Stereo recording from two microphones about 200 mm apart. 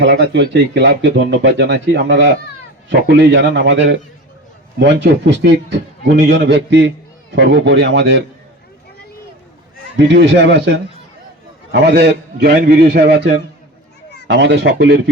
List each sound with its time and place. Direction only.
0.0 s speech: 60° right (ahead or behind)
10.0 s a man's voice: 60° right (ahead or behind)